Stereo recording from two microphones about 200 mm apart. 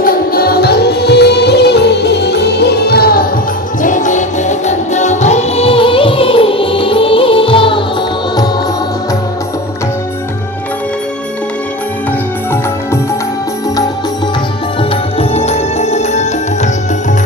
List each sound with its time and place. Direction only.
0.0 s music: 45° left (ahead or behind); by 7.9 s 25° left (ahead or behind)
14.8 s music: 30° left (ahead or behind)